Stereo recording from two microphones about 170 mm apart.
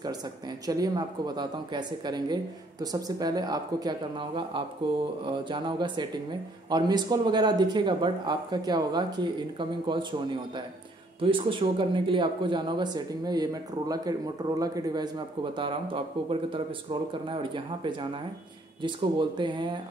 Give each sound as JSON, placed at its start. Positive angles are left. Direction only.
{"t": 0.7, "sound": "speech", "side_deg": -25}